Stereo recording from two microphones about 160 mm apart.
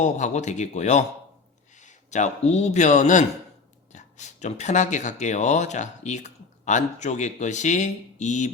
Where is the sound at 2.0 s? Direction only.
45° left (ahead or behind).